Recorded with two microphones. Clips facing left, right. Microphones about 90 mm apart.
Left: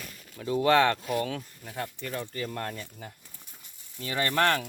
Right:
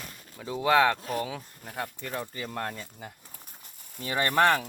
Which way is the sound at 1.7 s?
15° right (ahead or behind).